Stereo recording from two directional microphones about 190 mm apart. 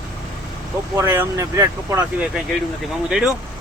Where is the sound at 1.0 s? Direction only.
15° right (ahead or behind).